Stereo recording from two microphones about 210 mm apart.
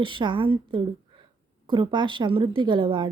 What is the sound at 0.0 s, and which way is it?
A woman's voice, 25° right (ahead or behind).